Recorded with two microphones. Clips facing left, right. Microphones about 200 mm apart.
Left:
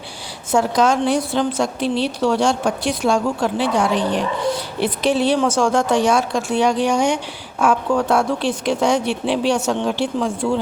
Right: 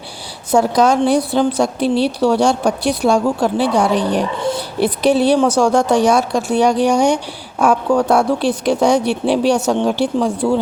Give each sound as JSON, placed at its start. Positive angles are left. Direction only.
{"t": 0.5, "sound": "speech", "side_deg": -35}